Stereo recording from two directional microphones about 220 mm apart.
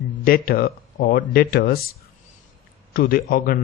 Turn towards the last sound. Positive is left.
turn(degrees=40)  # may be behind; listen again after turning